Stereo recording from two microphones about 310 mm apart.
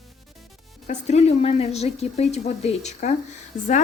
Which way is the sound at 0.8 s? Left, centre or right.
Left.